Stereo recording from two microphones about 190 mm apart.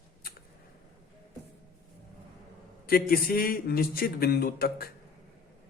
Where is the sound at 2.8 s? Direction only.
55° left (ahead or behind).